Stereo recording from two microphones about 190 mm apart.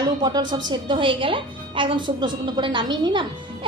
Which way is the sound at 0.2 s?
20° right (ahead or behind).